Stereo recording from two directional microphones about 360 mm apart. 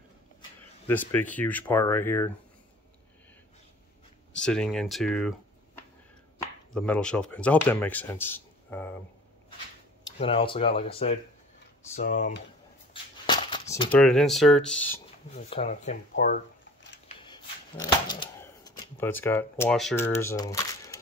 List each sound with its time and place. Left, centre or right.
0.8 s speech: centre
4.5 s speech: centre
6.7 s speech: centre
10.1 s speech: centre
11.9 s speech: left
12.9 s a sound: centre
14.0 s speech: centre
15.3 s speech: centre
16.8 s printer: left
17.2 s shuffling cards: centre